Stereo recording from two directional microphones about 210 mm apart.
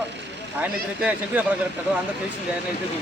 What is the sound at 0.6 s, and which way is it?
Speech, 5° right (ahead or behind).